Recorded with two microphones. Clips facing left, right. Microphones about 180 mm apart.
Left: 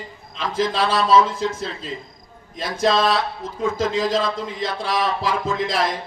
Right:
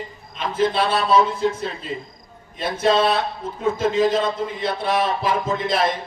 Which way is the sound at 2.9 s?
90° left.